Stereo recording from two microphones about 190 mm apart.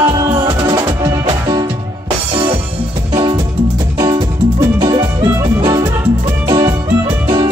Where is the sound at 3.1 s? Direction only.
25° right (ahead or behind).